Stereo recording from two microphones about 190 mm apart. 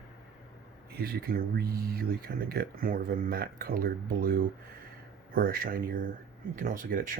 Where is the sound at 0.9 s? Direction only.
55° right (ahead or behind).